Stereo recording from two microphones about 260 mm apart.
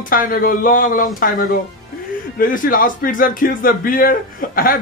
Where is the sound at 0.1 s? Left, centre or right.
Left.